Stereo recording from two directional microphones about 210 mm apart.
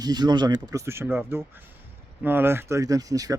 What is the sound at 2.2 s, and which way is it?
Speech, 10° right (ahead or behind).